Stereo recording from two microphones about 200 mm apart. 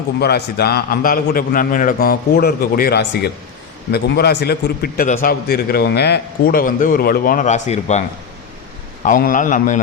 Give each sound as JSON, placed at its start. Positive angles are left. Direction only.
{"t": 0.2, "sound": "a man's voice", "side_deg": 55}
{"t": 9.0, "sound": "a man's voice", "side_deg": 45}